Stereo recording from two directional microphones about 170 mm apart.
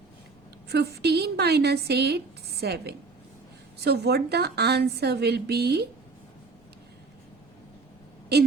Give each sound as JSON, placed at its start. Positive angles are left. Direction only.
{"t": 0.7, "sound": "speech", "side_deg": -70}